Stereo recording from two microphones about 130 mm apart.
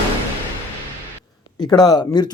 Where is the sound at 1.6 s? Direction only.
35° left (ahead or behind).